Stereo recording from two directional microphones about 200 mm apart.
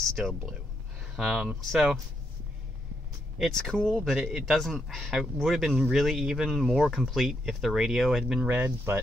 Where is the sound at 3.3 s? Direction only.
Centre (ahead or behind).